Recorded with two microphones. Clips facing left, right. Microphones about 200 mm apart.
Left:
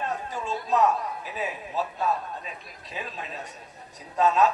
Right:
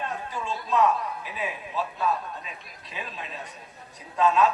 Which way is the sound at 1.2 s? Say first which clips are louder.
Left 1 dB; 40° left (ahead or behind).